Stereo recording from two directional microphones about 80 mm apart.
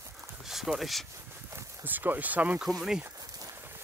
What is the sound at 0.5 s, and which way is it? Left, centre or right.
Speech, centre.